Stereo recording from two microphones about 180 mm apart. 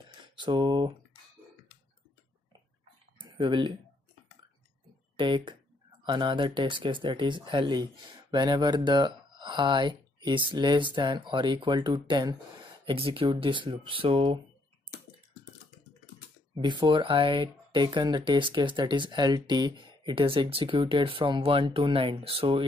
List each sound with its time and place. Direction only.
0.4 s speech: 25° right (ahead or behind)
3.2 s a sound: 25° right (ahead or behind)
5.1 s speech: 25° right (ahead or behind)
16.5 s speech: 25° right (ahead or behind)